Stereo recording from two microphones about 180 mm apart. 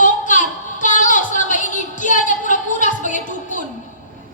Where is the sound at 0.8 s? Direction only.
45° left (ahead or behind).